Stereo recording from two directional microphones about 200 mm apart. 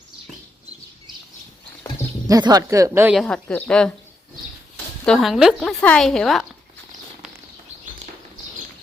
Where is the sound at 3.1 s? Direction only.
Centre (ahead or behind).